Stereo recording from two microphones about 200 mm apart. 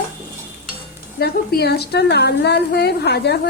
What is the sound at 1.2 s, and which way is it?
A woman's voice, 55° left (ahead or behind).